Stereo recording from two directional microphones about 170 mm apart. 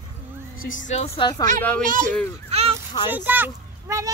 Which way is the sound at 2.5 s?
35° right (ahead or behind).